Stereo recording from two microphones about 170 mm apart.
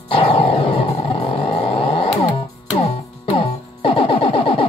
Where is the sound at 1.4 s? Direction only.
30° left (ahead or behind).